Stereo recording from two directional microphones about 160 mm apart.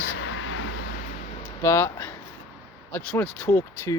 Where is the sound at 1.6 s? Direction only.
15° left (ahead or behind).